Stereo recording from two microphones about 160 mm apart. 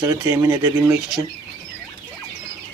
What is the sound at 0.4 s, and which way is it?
Speech, 25° right (ahead or behind).